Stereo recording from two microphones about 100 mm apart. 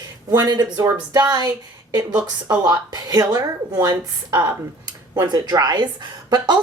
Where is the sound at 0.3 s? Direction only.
40° right (ahead or behind).